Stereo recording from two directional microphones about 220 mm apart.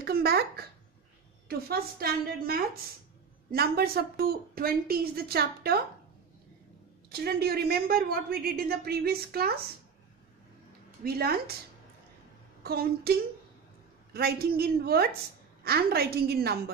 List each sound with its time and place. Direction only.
0.0 s a woman's voice: 45° right (ahead or behind)
7.1 s a woman's voice: 45° right (ahead or behind)
11.1 s a woman's voice: 45° right (ahead or behind)
12.6 s a woman's voice: 45° right (ahead or behind)
14.1 s a woman's voice: 45° right (ahead or behind)